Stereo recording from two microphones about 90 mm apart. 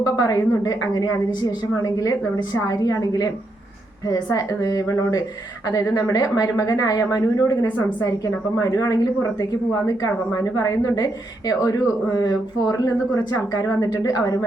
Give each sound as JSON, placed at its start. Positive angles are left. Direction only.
{"t": 0.0, "sound": "a woman's voice", "side_deg": 40}